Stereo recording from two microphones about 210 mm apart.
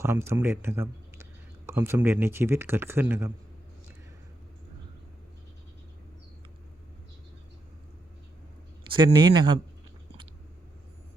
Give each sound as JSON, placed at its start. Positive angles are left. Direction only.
{"t": 0.0, "sound": "speech", "side_deg": -10}
{"t": 8.9, "sound": "speech", "side_deg": -25}